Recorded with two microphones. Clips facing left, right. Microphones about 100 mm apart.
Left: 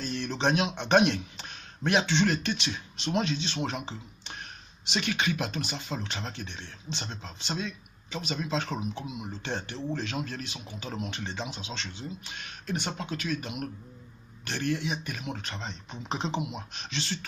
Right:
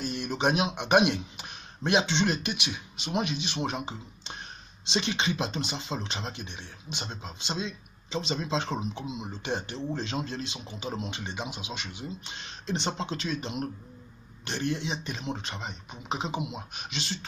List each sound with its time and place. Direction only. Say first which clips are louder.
0.0 s a man's voice: right 1 dB; 15° right (ahead or behind)